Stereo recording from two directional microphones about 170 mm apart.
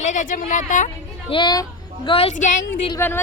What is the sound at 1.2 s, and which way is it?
A woman's voice, 30° left (ahead or behind).